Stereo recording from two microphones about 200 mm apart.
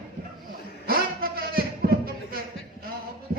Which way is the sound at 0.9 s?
50° right (ahead or behind).